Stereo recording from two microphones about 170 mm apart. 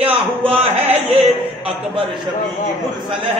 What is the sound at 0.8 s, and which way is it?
Speech, 35° right (ahead or behind).